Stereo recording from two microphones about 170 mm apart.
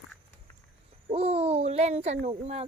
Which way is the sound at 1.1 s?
35° right (ahead or behind).